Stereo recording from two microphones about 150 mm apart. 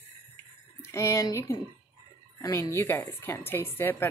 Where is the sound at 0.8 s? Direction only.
20° left (ahead or behind).